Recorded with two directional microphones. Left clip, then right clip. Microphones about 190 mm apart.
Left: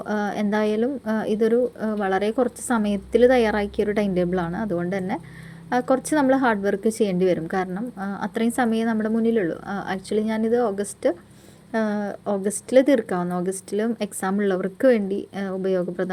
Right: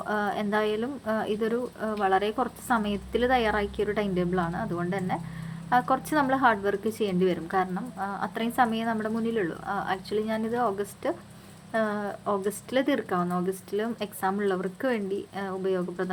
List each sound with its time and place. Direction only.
0.0 s a woman's voice: 40° left (ahead or behind)